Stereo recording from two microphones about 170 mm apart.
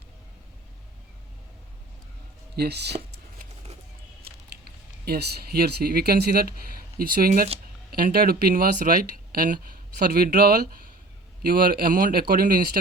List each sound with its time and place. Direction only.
2.6 s speech: 75° right (ahead or behind)
4.2 s speech: 65° right (ahead or behind)
7.0 s speech: 55° right (ahead or behind)